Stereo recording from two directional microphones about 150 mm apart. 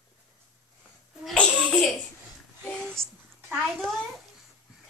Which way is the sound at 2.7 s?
5° left (ahead or behind).